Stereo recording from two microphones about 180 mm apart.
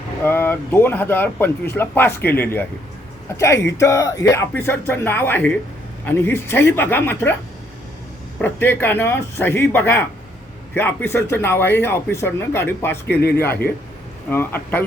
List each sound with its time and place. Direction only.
0.3 s speech: 10° left (ahead or behind)
8.4 s speech: 10° left (ahead or behind)
13.1 s speech: 60° left (ahead or behind)
14.3 s speech: 10° left (ahead or behind)